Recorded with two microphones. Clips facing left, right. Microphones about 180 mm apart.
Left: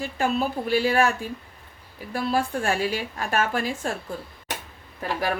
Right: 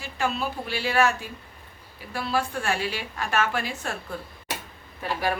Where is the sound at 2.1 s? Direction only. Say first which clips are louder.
Left 3 dB; 40° left (ahead or behind).